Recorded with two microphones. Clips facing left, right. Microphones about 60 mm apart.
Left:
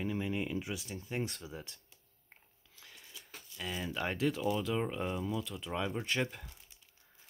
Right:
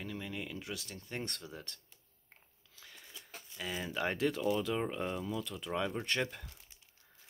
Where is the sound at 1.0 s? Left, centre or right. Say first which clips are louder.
Left 3 dB; centre.